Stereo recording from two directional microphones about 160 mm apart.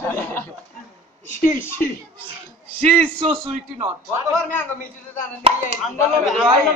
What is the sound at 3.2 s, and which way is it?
Speech, 15° right (ahead or behind).